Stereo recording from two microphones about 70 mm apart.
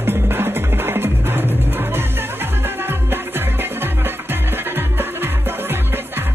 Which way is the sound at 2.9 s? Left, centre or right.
Right.